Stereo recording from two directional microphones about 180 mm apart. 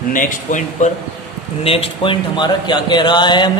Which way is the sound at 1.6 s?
30° left (ahead or behind).